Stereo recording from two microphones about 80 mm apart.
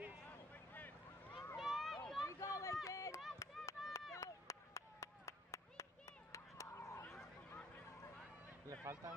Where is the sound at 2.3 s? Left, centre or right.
Left.